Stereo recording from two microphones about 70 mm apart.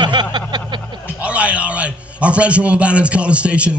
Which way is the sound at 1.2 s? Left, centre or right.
Centre.